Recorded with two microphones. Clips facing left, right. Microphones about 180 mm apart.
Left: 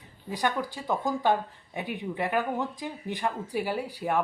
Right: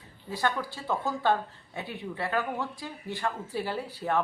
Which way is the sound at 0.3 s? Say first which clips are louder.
Left 1 dB; 15° left (ahead or behind).